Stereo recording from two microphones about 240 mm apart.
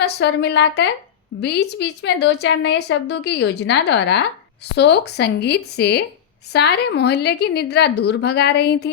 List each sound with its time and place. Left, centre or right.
0.0 s a woman's voice: left